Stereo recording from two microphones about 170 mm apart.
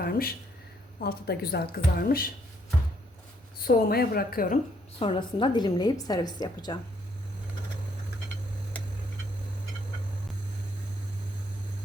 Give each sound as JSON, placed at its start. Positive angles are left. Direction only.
{"t": 0.0, "sound": "a woman's voice", "side_deg": 60}
{"t": 3.6, "sound": "a woman's voice", "side_deg": 65}
{"t": 4.9, "sound": "a woman's voice", "side_deg": 30}